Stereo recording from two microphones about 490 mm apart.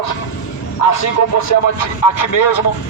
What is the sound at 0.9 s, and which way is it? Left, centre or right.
Speech, left.